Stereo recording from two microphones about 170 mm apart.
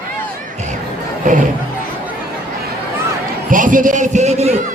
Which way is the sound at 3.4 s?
50° right (ahead or behind).